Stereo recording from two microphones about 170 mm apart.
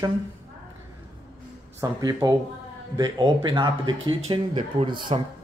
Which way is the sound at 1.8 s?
20° right (ahead or behind).